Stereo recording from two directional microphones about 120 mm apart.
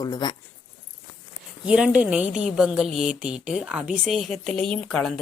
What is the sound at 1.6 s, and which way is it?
A woman's voice, 10° right (ahead or behind).